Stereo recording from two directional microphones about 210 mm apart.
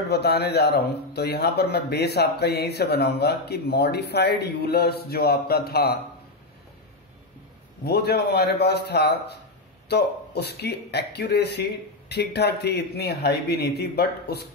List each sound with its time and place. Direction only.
0.1 s speech: 50° left (ahead or behind)
7.8 s speech: 50° left (ahead or behind)